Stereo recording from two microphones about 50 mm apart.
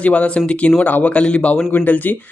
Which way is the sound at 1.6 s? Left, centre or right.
Left.